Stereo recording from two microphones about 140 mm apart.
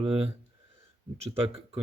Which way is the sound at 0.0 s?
40° right (ahead or behind).